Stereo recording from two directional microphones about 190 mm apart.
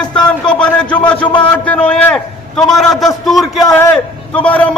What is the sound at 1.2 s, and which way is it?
Speech, 25° left (ahead or behind).